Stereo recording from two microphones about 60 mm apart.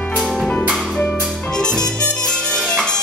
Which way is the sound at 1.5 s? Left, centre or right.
Centre.